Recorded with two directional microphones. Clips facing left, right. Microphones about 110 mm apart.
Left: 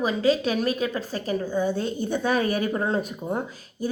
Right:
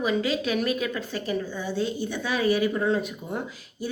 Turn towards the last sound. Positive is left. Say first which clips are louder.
# left 2 dB
turn(degrees=40)  # may be behind; listen again after turning